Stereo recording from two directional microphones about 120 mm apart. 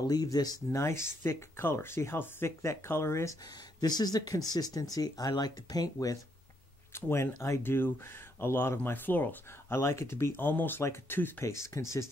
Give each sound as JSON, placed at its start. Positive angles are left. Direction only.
{"t": 0.0, "sound": "speech", "side_deg": 30}
{"t": 3.8, "sound": "speech", "side_deg": 35}
{"t": 6.9, "sound": "speech", "side_deg": 20}